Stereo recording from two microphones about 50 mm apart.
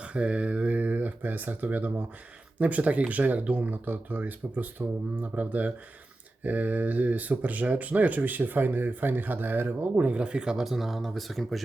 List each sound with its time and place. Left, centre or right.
0.0 s speech: right
10.1 s speech: right
10.7 s speech: centre